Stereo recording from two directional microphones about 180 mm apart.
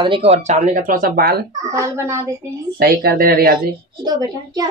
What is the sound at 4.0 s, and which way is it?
Speech, 20° right (ahead or behind).